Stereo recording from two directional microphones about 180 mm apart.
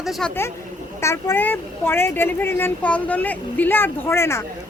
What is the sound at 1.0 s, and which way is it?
Speech, 15° left (ahead or behind).